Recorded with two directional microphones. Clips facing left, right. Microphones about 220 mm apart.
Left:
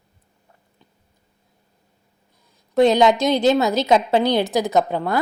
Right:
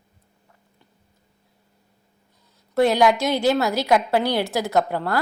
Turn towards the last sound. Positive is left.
turn(degrees=20)  # may be behind; listen again after turning